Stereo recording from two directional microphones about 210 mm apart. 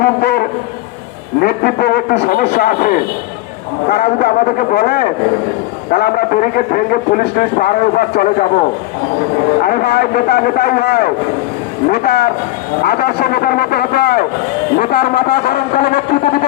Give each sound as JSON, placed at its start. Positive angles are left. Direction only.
{"t": 0.0, "sound": "a sound", "side_deg": 50}
{"t": 1.4, "sound": "a man's voice", "side_deg": 50}
{"t": 9.6, "sound": "a man's voice", "side_deg": 45}